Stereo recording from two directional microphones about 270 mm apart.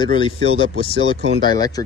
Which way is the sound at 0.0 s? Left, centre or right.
Centre.